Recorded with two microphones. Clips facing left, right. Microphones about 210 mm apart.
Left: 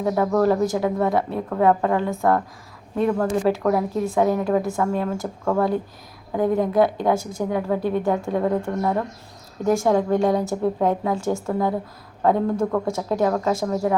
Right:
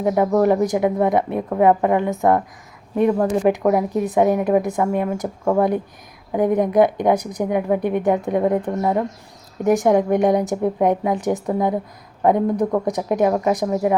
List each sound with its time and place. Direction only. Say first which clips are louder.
0.0 s a woman's voice: right 3 dB; 15° right (ahead or behind)